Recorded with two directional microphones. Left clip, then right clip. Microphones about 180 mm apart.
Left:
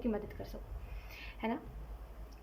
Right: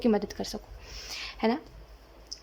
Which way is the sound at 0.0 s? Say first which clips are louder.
Right 11 dB; 35° right (ahead or behind).